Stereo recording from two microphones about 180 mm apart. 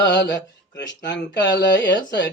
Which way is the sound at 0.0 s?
75° left (ahead or behind).